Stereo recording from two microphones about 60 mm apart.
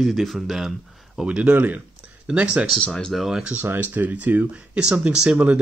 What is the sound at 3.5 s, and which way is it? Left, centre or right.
Speech, right.